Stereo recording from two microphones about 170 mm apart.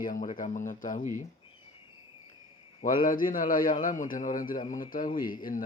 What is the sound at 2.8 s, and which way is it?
Speech, 55° left (ahead or behind).